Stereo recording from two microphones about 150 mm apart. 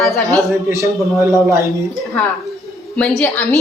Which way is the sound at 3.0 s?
5° left (ahead or behind).